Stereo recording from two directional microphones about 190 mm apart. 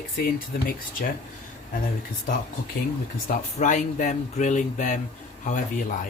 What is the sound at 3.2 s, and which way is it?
Speech, 40° left (ahead or behind).